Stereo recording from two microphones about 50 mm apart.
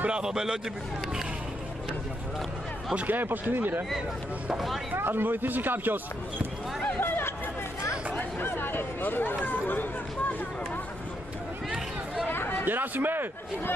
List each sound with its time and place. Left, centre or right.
0.0 s a man's voice: centre
3.1 s a man's voice: right
4.9 s a man's voice: right
7.0 s chatter: left
8.2 s speech: left
12.3 s a sound: left
12.6 s a man's voice: right